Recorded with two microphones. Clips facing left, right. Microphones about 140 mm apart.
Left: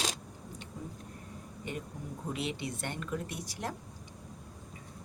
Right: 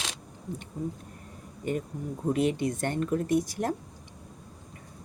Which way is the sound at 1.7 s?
45° right (ahead or behind).